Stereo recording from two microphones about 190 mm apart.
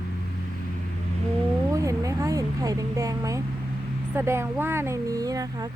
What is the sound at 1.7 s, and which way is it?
Speech, 15° right (ahead or behind).